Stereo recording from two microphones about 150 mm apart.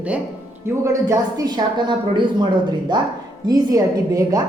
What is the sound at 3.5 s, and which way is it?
Speech, 25° right (ahead or behind).